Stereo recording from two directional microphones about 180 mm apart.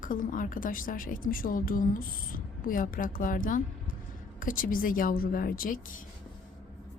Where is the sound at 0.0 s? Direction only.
50° left (ahead or behind).